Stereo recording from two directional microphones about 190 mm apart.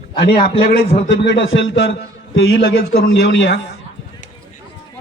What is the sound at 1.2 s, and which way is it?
Speech, 75° left (ahead or behind).